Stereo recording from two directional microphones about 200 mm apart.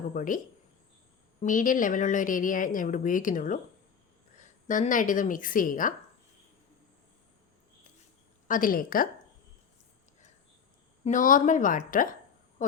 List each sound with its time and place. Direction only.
0.1 s a woman's voice: 40° left (ahead or behind)
8.4 s a woman's voice: 45° left (ahead or behind)
11.0 s a woman's voice: 40° left (ahead or behind)